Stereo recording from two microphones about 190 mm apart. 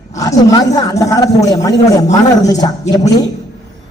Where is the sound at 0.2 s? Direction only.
20° left (ahead or behind).